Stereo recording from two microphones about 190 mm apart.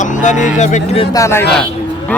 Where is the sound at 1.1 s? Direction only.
15° left (ahead or behind).